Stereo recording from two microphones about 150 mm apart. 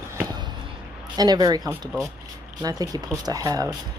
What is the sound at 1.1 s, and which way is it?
Speech, 25° right (ahead or behind).